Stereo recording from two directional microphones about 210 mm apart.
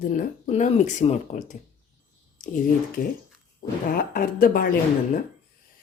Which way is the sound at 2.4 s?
35° left (ahead or behind).